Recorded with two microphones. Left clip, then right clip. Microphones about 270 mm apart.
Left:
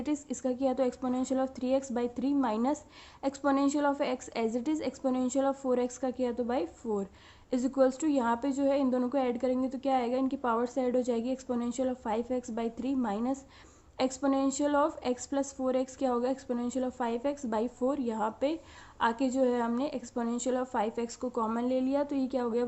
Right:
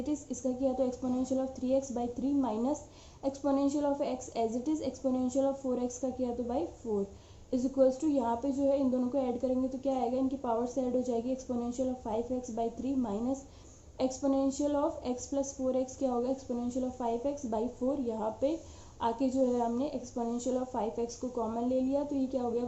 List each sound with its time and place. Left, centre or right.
0.0 s a woman's voice: left